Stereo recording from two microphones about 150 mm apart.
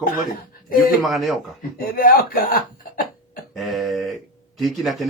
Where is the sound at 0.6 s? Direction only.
70° left (ahead or behind).